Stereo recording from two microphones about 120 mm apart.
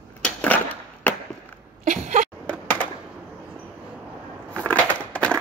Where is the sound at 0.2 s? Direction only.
15° left (ahead or behind).